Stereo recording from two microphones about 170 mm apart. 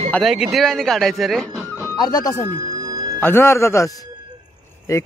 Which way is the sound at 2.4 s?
20° right (ahead or behind).